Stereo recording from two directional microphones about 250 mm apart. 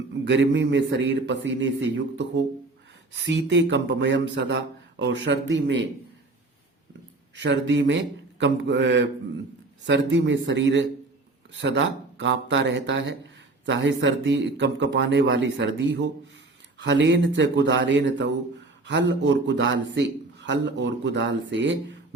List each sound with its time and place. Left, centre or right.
0.3 s speech: right
7.3 s speech: right